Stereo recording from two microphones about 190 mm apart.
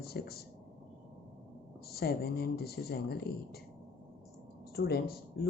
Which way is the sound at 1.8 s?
55° left (ahead or behind).